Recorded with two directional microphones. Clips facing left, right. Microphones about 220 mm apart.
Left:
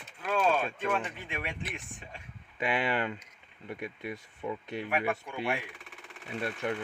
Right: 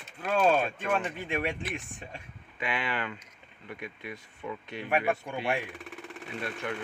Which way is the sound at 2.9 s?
35° left (ahead or behind).